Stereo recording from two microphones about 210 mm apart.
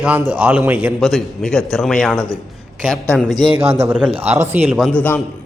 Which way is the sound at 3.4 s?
25° right (ahead or behind).